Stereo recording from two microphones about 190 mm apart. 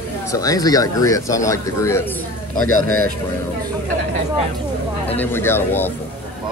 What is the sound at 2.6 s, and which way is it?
Speech, 90° left.